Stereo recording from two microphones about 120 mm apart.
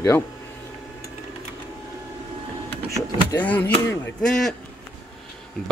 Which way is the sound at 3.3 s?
15° left (ahead or behind).